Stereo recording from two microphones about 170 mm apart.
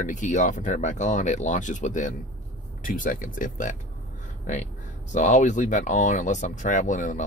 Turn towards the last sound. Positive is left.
turn(degrees=45)  # may be behind; listen again after turning